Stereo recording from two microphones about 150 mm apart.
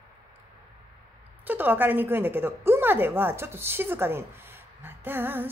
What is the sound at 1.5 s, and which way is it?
Female singing, 10° right (ahead or behind).